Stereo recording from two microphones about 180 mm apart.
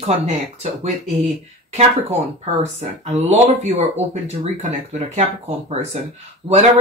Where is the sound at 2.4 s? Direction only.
40° right (ahead or behind).